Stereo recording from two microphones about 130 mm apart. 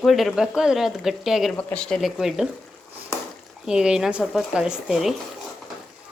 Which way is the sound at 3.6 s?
5° right (ahead or behind).